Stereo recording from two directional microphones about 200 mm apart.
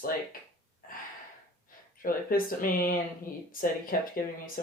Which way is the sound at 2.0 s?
45° left (ahead or behind).